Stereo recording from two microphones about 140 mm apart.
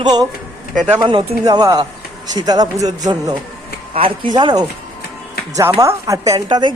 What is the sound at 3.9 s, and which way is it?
Speech, 40° right (ahead or behind).